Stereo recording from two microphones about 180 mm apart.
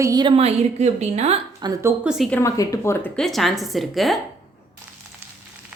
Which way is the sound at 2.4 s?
20° left (ahead or behind).